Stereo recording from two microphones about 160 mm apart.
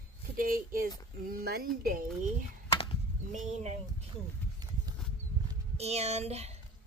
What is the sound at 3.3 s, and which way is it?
Speech, 50° right (ahead or behind).